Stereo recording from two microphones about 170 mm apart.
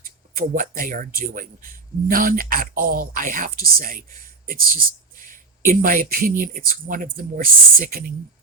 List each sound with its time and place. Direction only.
0.0 s speech: 55° right (ahead or behind)